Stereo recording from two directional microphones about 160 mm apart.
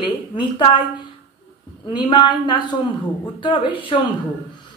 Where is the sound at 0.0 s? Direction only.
30° left (ahead or behind).